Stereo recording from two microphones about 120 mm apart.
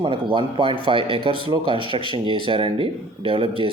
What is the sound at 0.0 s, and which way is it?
Speech, 45° right (ahead or behind).